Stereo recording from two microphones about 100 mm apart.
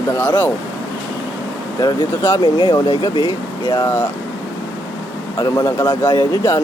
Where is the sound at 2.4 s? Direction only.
50° left (ahead or behind).